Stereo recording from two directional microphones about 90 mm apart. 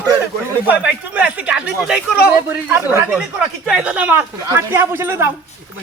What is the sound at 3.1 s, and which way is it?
Speech, 10° right (ahead or behind).